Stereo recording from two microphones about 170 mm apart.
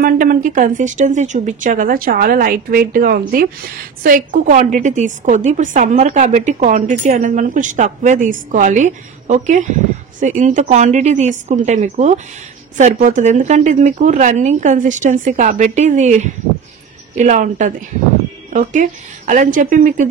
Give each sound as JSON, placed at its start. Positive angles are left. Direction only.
{"t": 0.0, "sound": "a woman's voice", "side_deg": -55}